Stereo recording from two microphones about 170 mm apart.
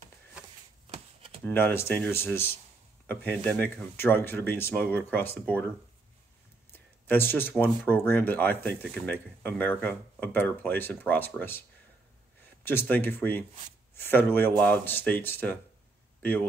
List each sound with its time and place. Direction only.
0.9 s a sound: 35° right (ahead or behind)
1.4 s speech: 10° left (ahead or behind)
7.1 s speech: 10° left (ahead or behind)
12.6 s speech: 10° left (ahead or behind)